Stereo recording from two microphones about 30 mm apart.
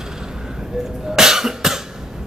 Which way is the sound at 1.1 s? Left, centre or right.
Centre.